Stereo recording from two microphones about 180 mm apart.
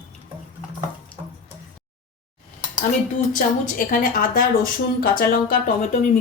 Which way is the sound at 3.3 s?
50° left (ahead or behind).